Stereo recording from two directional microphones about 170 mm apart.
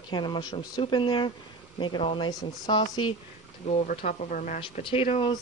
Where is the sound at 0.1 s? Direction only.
25° left (ahead or behind).